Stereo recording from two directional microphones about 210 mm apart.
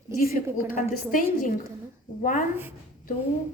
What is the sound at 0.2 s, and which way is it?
A woman's voice, 40° left (ahead or behind).